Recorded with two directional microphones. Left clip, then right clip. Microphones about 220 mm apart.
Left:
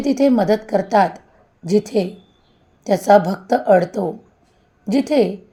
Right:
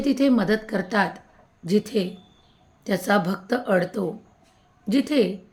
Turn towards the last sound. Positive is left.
turn(degrees=15)  # may be behind; listen again after turning